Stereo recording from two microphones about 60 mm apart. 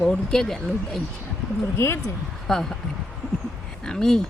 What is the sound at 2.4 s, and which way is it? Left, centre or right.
Speech, centre.